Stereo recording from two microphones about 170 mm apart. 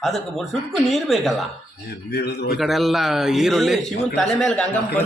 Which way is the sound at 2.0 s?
75° left (ahead or behind).